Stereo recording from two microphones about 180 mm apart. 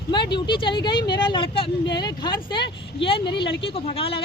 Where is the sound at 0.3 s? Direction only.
25° left (ahead or behind).